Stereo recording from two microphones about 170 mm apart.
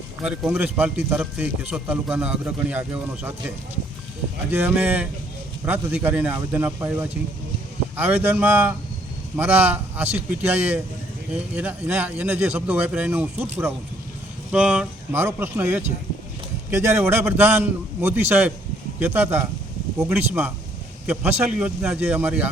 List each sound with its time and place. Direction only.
0.2 s a man's voice: 5° right (ahead or behind)
4.5 s a man's voice: 10° right (ahead or behind)
16.7 s a man's voice: 15° right (ahead or behind)